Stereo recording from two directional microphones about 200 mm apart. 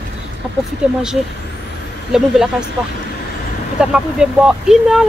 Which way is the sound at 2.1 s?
Centre (ahead or behind).